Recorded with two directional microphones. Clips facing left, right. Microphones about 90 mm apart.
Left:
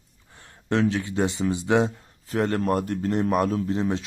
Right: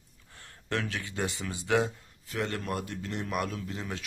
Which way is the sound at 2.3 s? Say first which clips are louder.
Left 9 dB; 40° left (ahead or behind).